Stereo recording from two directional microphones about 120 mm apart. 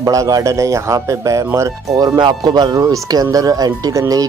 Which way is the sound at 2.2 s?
35° right (ahead or behind).